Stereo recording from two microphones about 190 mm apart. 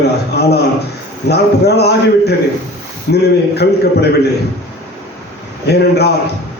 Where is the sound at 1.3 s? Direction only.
60° left (ahead or behind).